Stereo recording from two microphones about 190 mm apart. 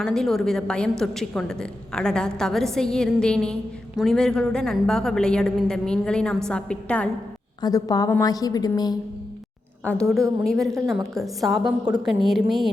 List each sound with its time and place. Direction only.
0.0 s a woman's voice: 5° left (ahead or behind)
7.6 s a woman's voice: 20° left (ahead or behind)
9.8 s a woman's voice: 5° left (ahead or behind)